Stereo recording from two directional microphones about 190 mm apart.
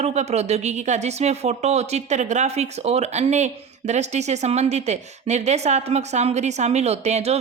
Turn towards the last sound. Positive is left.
turn(degrees=-35)  # may be behind; listen again after turning